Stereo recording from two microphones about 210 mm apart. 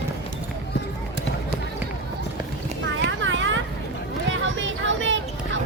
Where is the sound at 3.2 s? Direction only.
60° right (ahead or behind).